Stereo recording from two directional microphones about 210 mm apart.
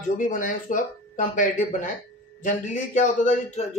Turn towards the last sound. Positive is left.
turn(degrees=35)  # may be behind; listen again after turning